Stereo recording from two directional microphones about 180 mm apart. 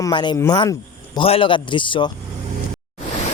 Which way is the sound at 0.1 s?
25° left (ahead or behind).